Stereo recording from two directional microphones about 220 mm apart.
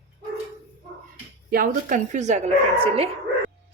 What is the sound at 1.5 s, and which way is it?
Speech, 40° right (ahead or behind).